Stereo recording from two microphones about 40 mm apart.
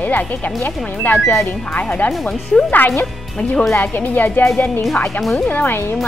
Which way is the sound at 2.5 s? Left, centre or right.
Left.